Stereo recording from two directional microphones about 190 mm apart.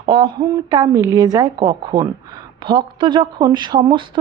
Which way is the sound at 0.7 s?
20° right (ahead or behind).